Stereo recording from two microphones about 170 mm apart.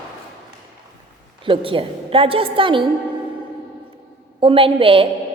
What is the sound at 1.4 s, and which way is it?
A woman's voice, 30° right (ahead or behind).